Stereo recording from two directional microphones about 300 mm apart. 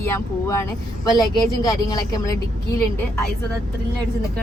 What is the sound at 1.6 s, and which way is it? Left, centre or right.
Speech, centre.